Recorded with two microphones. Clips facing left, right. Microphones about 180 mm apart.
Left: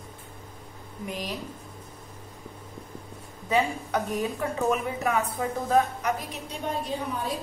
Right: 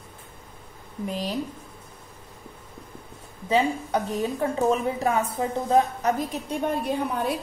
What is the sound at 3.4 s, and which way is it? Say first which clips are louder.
A woman's voice: right 3 dB; 25° right (ahead or behind).